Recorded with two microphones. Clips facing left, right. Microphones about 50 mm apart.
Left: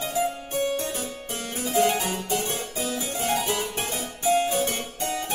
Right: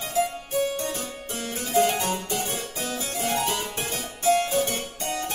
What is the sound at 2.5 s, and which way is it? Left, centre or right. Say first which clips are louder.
Harpsichord: left 1 dB; centre.